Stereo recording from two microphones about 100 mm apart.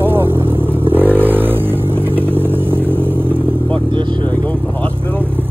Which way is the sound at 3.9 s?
50° right (ahead or behind).